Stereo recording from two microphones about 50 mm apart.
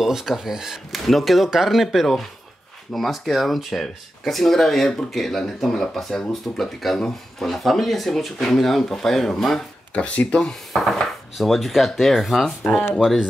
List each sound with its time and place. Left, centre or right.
0.0 s speech: centre
9.9 s speech: left
10.5 s speech: centre